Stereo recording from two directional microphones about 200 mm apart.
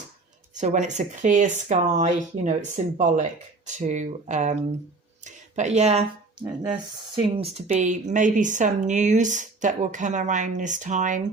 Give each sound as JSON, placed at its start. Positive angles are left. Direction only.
{"t": 0.5, "sound": "speech", "side_deg": -35}
{"t": 6.4, "sound": "speech", "side_deg": -20}
{"t": 7.7, "sound": "speech", "side_deg": -40}